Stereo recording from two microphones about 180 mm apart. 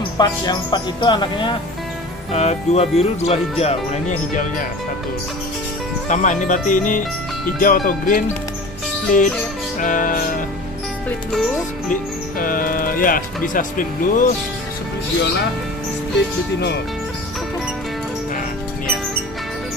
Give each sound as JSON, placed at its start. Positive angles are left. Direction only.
{"t": 0.2, "sound": "speech", "side_deg": 25}
{"t": 6.0, "sound": "speech", "side_deg": 45}
{"t": 11.9, "sound": "speech", "side_deg": 50}